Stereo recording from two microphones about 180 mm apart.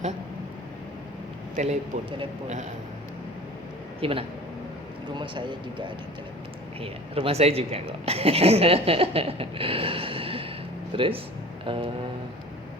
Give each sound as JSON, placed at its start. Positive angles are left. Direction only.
{"t": 1.5, "sound": "speech", "side_deg": -40}
{"t": 4.0, "sound": "speech", "side_deg": -30}